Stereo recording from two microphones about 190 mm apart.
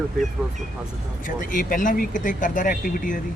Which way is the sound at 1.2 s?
45° left (ahead or behind).